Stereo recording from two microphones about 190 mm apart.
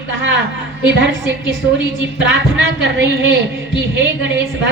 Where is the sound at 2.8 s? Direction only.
70° right (ahead or behind).